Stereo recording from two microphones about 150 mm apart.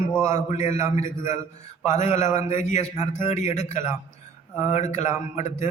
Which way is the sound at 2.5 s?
50° left (ahead or behind).